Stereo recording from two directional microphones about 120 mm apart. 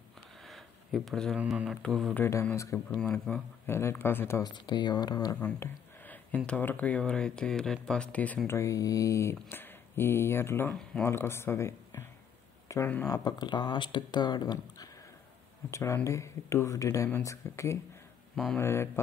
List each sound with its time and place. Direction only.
0.5 s a sound: centre (ahead or behind)
1.3 s speech: 10° right (ahead or behind)
2.1 s speech: 20° left (ahead or behind)
2.9 s speech: 10° left (ahead or behind)
3.6 s speech: 20° left (ahead or behind)
4.4 s speech: 40° left (ahead or behind)
5.4 s speech: 15° left (ahead or behind)
8.5 s speech: 25° left (ahead or behind)
12.6 s a sound: 25° left (ahead or behind)
13.0 s speech: 35° left (ahead or behind)
15.7 s speech: 25° left (ahead or behind)
18.3 s speech: 5° left (ahead or behind)
18.6 s speech: 20° left (ahead or behind)